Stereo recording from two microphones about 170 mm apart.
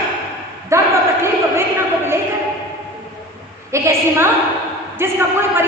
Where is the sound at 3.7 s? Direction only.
15° right (ahead or behind).